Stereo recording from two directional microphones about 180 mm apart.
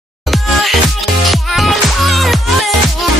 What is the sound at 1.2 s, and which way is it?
Music, centre (ahead or behind).